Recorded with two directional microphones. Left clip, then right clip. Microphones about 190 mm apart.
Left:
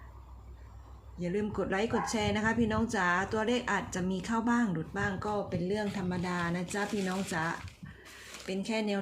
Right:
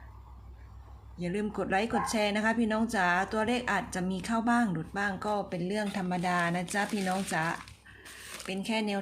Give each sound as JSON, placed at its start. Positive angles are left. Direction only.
{"t": 1.2, "sound": "a woman's voice", "side_deg": -15}